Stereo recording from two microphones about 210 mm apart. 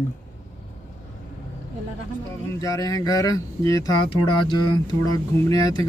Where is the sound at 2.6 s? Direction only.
15° left (ahead or behind).